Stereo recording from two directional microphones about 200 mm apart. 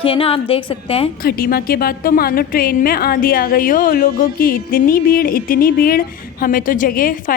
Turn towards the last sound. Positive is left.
turn(degrees=45)  # may be behind; listen again after turning